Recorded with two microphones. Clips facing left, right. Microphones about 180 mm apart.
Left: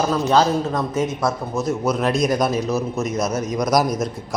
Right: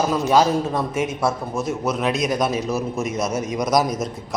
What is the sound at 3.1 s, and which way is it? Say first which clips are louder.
Speech: left 2 dB; 25° right (ahead or behind).